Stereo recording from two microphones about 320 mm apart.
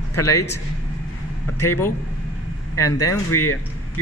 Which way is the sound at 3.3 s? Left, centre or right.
Left.